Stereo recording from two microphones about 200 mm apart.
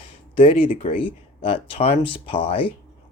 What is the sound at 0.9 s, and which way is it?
Speech, 25° left (ahead or behind).